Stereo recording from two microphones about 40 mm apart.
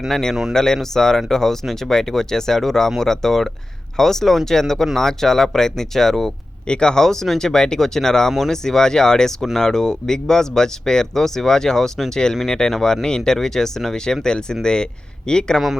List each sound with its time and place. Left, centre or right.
0.1 s speech: centre
6.7 s a man's voice: left